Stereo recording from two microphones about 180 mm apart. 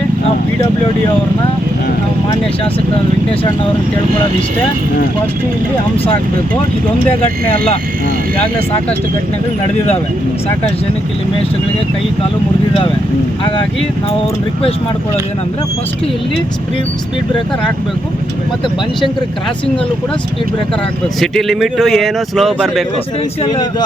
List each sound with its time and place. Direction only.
21.2 s speech: centre (ahead or behind)
23.4 s speech: 25° left (ahead or behind)